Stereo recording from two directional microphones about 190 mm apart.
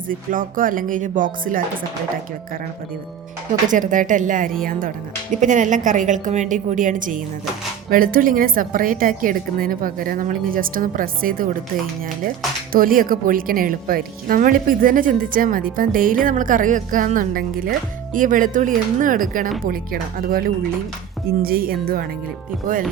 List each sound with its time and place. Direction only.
0.1 s a woman's voice: 45° right (ahead or behind)
3.7 s a woman's voice: 45° right (ahead or behind)
12.7 s a woman's voice: 50° right (ahead or behind)